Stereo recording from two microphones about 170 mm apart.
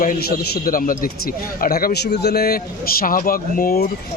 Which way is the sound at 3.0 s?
55° left (ahead or behind).